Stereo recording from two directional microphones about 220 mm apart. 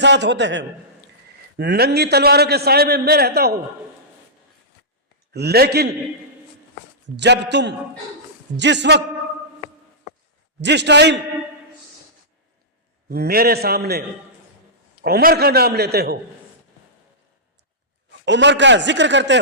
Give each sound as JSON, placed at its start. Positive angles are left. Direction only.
{"t": 0.0, "sound": "a man's voice", "side_deg": -55}
{"t": 5.3, "sound": "a man's voice", "side_deg": -45}
{"t": 7.2, "sound": "a man's voice", "side_deg": -50}
{"t": 10.6, "sound": "a man's voice", "side_deg": -50}
{"t": 13.1, "sound": "a man's voice", "side_deg": -45}
{"t": 15.0, "sound": "a man's voice", "side_deg": -45}
{"t": 18.3, "sound": "a man's voice", "side_deg": -55}